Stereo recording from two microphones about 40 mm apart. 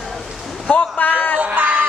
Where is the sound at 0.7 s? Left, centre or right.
Left.